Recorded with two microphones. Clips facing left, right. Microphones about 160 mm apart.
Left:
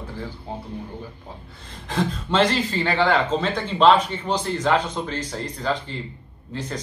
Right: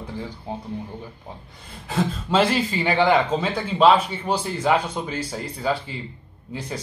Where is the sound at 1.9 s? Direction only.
5° right (ahead or behind).